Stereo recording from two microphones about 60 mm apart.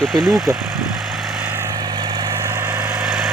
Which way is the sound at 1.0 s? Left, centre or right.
Centre.